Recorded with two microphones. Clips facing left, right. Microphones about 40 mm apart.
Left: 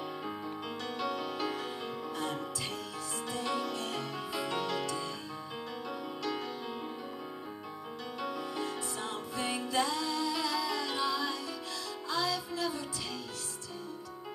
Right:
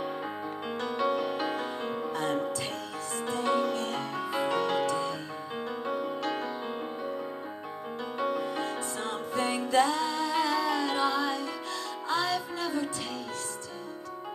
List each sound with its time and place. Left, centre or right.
0.8 s music: right
8.2 s music: right